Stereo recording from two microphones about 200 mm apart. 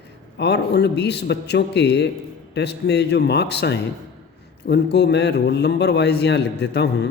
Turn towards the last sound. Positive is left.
turn(degrees=55)  # may be behind; listen again after turning